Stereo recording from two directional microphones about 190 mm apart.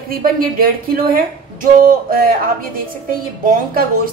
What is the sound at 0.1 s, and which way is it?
A woman's voice, 50° right (ahead or behind).